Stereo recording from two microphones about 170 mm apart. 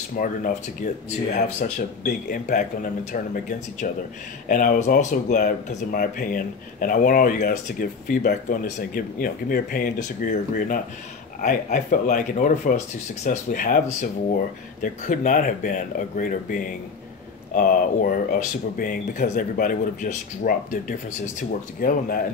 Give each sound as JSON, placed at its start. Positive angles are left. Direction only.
{"t": 0.2, "sound": "speech", "side_deg": 45}
{"t": 2.0, "sound": "speech", "side_deg": 55}